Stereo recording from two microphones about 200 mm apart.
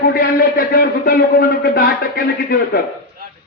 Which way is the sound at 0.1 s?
50° left (ahead or behind).